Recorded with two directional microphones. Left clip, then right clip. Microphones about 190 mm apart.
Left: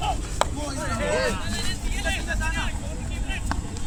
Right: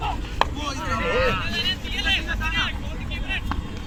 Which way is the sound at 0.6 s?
60° left (ahead or behind).